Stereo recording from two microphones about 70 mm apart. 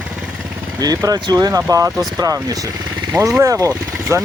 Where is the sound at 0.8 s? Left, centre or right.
Right.